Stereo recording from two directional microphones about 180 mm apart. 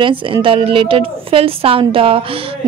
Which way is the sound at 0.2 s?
30° right (ahead or behind).